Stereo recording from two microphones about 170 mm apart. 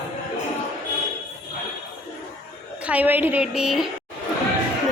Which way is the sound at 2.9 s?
10° right (ahead or behind).